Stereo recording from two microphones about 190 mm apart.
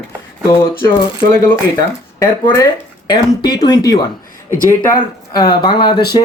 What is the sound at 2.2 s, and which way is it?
Speech, 15° left (ahead or behind).